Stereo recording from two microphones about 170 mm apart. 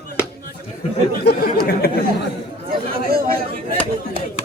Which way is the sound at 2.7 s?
60° right (ahead or behind).